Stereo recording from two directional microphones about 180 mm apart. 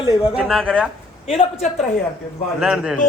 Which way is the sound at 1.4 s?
35° left (ahead or behind).